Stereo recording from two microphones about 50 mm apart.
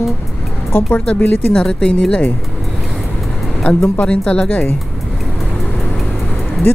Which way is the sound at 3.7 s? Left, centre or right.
Left.